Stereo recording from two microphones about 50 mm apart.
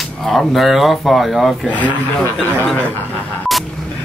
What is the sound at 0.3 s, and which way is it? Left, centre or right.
Speech, centre.